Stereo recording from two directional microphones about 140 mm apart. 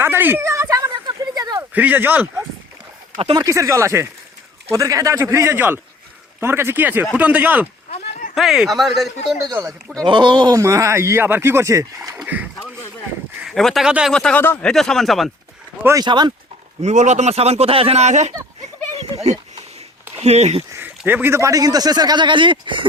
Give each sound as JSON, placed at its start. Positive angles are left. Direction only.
{"t": 0.0, "sound": "a sound", "side_deg": -15}
{"t": 1.7, "sound": "a man's voice", "side_deg": -10}
{"t": 10.1, "sound": "a man's voice", "side_deg": -35}
{"t": 12.1, "sound": "rowboat", "side_deg": -10}
{"t": 13.4, "sound": "speech", "side_deg": 0}
{"t": 14.1, "sound": "speech", "side_deg": 5}
{"t": 15.8, "sound": "speech", "side_deg": -20}
{"t": 16.0, "sound": "speech", "side_deg": -30}
{"t": 16.8, "sound": "speech", "side_deg": -55}
{"t": 20.2, "sound": "speech", "side_deg": -50}
{"t": 20.7, "sound": "a man's voice", "side_deg": -15}